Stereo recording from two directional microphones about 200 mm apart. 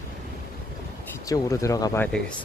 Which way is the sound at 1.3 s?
15° left (ahead or behind).